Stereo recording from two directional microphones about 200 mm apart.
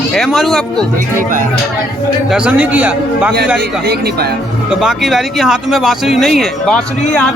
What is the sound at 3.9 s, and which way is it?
Speech, 55° right (ahead or behind).